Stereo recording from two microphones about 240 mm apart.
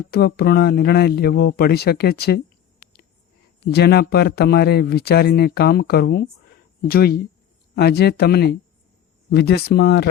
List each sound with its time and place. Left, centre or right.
0.1 s speech: left
3.7 s speech: left